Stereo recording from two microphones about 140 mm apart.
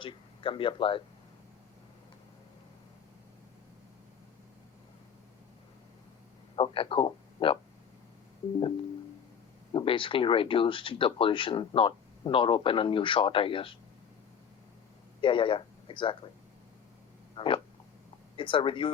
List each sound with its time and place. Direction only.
0.0 s speech: 40° left (ahead or behind)
6.6 s speech: 40° left (ahead or behind)
9.7 s speech: 35° left (ahead or behind)
15.2 s speech: 35° left (ahead or behind)
17.3 s frog: 35° left (ahead or behind)
18.3 s speech: 35° left (ahead or behind)